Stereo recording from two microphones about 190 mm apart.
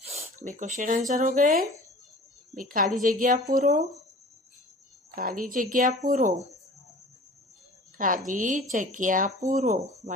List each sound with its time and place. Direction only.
0.0 s speech: 35° right (ahead or behind)
5.1 s speech: 45° right (ahead or behind)
7.9 s a woman's voice: 45° right (ahead or behind)